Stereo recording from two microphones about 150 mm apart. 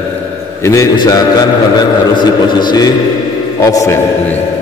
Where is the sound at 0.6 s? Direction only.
20° left (ahead or behind).